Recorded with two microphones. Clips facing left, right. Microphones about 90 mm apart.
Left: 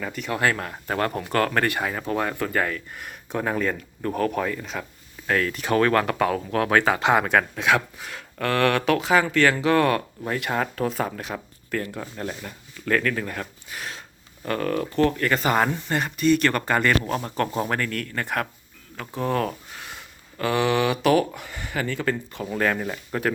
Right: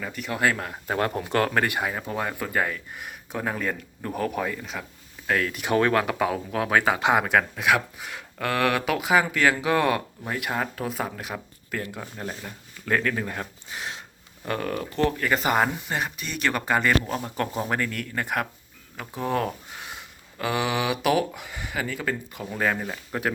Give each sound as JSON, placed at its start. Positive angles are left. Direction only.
{"t": 0.0, "sound": "speech", "side_deg": 0}
{"t": 0.9, "sound": "speech", "side_deg": -20}
{"t": 3.3, "sound": "speech", "side_deg": -5}